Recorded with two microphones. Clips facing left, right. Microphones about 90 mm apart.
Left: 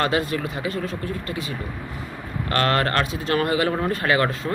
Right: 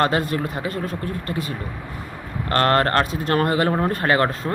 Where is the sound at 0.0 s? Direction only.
45° right (ahead or behind).